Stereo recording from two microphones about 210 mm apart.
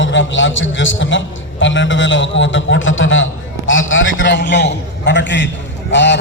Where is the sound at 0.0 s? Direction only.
65° left (ahead or behind).